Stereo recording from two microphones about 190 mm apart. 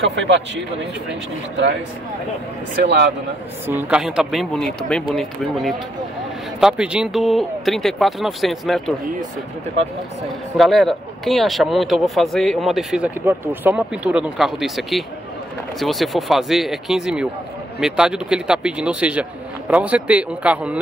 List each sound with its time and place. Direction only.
2.8 s a man's voice: 60° right (ahead or behind)
3.6 s speech: 10° right (ahead or behind)
10.6 s speech: centre (ahead or behind)